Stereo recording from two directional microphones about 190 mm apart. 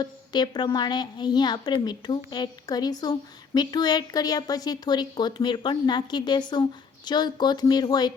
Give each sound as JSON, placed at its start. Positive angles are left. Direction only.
{"t": 0.0, "sound": "a woman's voice", "side_deg": 20}